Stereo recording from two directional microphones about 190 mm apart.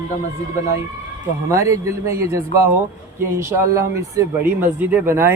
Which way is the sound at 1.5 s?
15° right (ahead or behind).